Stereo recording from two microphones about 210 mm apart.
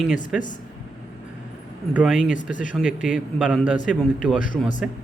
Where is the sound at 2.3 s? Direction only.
40° left (ahead or behind).